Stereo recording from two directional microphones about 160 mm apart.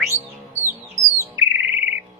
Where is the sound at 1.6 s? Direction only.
10° right (ahead or behind).